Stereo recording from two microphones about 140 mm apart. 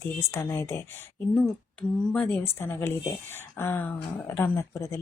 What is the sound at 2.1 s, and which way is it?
Speech, 10° left (ahead or behind).